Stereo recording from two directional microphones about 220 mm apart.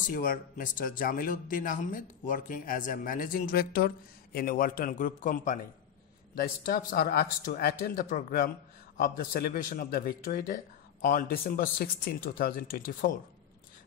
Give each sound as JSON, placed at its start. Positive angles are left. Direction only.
{"t": 0.0, "sound": "speech", "side_deg": 40}